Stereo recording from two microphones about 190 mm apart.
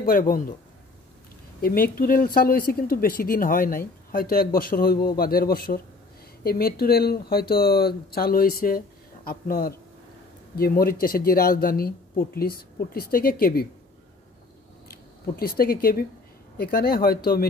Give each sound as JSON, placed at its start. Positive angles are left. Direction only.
{"t": 0.0, "sound": "speech", "side_deg": 50}
{"t": 1.6, "sound": "speech", "side_deg": 50}
{"t": 14.9, "sound": "speech", "side_deg": 50}